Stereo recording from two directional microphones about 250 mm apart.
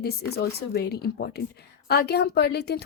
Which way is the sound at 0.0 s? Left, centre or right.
Left.